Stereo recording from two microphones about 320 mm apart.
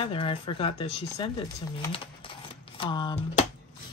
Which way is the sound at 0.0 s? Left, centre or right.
Centre.